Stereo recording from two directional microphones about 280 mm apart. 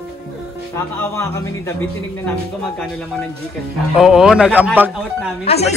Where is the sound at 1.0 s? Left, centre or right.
Centre.